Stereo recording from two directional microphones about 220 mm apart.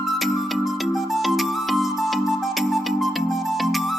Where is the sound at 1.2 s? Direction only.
Centre (ahead or behind).